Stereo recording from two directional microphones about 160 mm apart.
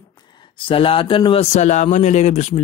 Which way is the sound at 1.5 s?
45° left (ahead or behind).